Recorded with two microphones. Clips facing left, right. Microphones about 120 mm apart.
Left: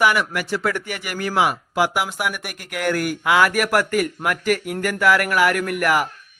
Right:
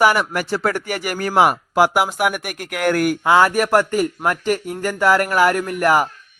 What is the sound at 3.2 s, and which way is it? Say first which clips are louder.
Speech: right 2 dB; 30° right (ahead or behind).